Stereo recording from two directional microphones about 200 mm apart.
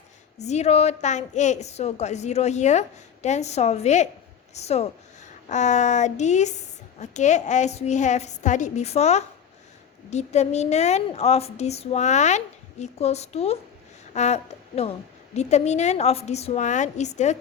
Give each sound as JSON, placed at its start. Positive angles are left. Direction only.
{"t": 0.3, "sound": "speech", "side_deg": 35}